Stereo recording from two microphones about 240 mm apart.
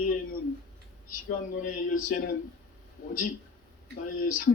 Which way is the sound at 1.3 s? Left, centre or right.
Left.